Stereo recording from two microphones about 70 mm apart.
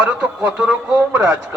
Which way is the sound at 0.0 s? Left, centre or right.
Centre.